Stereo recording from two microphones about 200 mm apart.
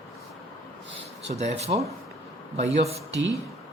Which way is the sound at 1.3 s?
35° right (ahead or behind).